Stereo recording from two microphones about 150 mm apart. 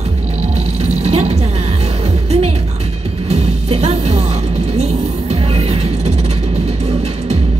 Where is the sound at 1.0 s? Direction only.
40° right (ahead or behind).